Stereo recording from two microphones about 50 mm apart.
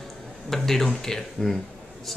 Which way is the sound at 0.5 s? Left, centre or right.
Centre.